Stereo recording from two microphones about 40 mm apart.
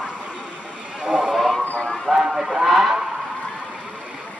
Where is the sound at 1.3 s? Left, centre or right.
Centre.